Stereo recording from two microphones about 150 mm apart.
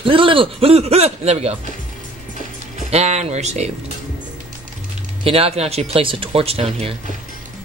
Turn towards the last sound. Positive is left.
turn(degrees=-40)  # may be behind; listen again after turning